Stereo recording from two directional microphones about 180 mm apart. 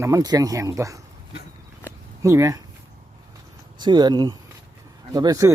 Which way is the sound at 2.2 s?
15° right (ahead or behind).